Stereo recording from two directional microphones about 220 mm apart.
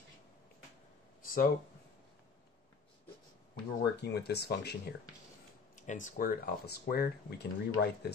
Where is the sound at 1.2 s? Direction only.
40° left (ahead or behind).